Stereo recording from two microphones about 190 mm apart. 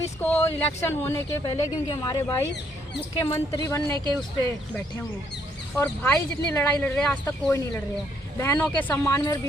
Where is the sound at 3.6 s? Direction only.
15° left (ahead or behind).